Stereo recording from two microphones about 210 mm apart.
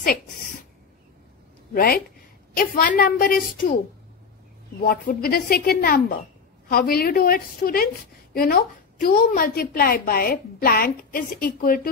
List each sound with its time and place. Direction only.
1.7 s a woman's voice: 45° left (ahead or behind)
4.8 s a woman's voice: 45° left (ahead or behind)